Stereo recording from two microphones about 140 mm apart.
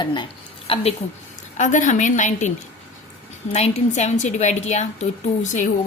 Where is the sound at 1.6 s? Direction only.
60° left (ahead or behind).